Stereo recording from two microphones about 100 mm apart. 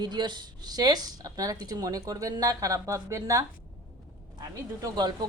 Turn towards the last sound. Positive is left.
turn(degrees=-45)  # may be behind; listen again after turning